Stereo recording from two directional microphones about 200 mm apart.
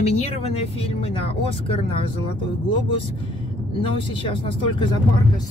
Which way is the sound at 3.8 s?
25° left (ahead or behind).